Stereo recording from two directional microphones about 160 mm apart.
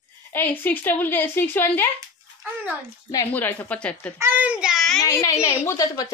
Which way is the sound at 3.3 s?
10° left (ahead or behind).